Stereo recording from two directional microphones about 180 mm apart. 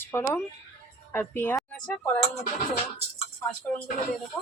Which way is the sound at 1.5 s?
Centre (ahead or behind).